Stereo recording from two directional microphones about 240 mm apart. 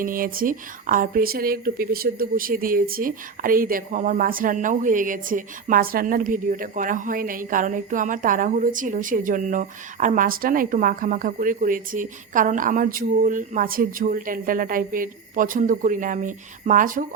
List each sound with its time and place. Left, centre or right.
0.0 s speech: right